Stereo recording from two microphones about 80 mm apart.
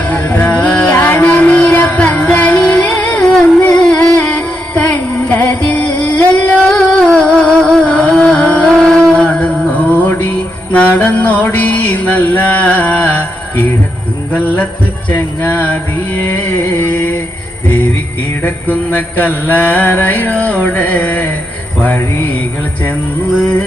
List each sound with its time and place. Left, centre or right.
0.1 s music: centre
6.7 s music: centre
10.7 s mantra: centre
14.3 s music: left
15.1 s a sound: left
17.7 s music: left
18.4 s mantra: left